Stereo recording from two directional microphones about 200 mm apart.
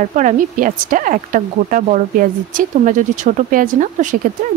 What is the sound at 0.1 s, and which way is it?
Speech, 40° right (ahead or behind).